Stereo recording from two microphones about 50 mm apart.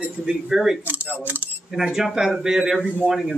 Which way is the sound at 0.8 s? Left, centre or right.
Right.